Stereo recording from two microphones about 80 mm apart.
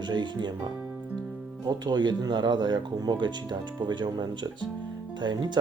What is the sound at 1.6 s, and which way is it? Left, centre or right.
Speech, right.